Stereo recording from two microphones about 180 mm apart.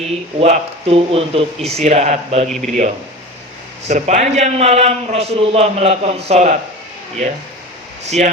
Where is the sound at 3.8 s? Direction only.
40° right (ahead or behind).